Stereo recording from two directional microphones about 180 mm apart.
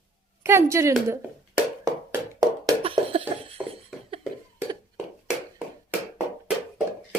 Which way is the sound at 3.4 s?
30° right (ahead or behind).